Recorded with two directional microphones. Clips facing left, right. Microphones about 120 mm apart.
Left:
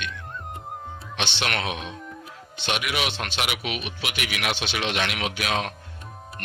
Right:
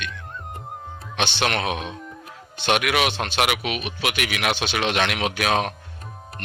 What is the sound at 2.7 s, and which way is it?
Speech, 55° right (ahead or behind).